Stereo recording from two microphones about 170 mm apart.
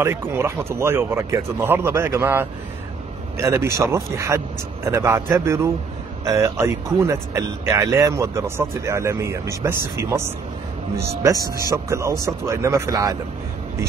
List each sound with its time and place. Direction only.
0.0 s speech: 15° right (ahead or behind)
11.7 s speech: 15° right (ahead or behind)